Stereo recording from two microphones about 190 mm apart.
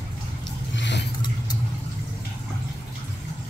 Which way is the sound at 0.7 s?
70° left (ahead or behind).